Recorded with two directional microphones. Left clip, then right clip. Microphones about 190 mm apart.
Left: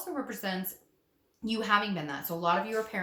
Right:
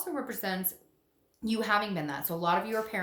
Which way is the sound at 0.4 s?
35° right (ahead or behind).